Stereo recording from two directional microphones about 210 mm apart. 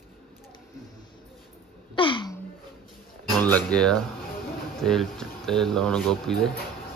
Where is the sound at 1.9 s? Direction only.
25° left (ahead or behind).